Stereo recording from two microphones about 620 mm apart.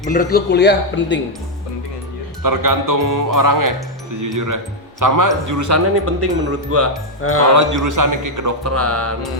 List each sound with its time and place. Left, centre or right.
0.0 s speech: centre
2.4 s speech: right
7.2 s speech: left
7.4 s speech: right